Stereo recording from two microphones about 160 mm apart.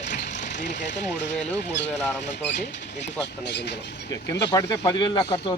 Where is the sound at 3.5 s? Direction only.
90° left.